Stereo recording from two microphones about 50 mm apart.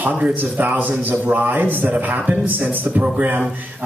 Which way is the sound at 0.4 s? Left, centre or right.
Right.